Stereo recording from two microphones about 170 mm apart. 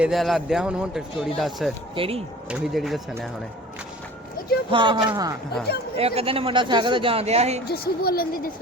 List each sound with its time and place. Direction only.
0.0 s speech: centre (ahead or behind)
2.0 s a man's voice: 35° right (ahead or behind)
2.5 s speech: 5° right (ahead or behind)
4.7 s speech: 30° right (ahead or behind)
6.0 s a man's voice: 35° right (ahead or behind)
7.7 s a woman's voice: 65° left (ahead or behind)